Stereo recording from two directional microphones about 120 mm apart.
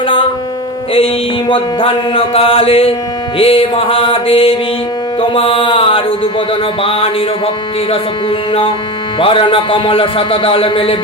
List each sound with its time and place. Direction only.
0.9 s music: 50° left (ahead or behind)
9.1 s music: 50° left (ahead or behind)